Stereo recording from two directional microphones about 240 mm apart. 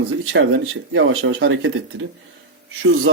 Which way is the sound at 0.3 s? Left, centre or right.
Right.